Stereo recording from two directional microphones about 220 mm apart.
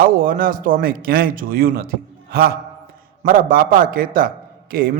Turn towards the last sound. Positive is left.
turn(degrees=-40)  # may be behind; listen again after turning